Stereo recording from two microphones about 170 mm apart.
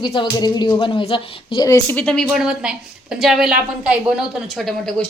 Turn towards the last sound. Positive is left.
turn(degrees=5)  # may be behind; listen again after turning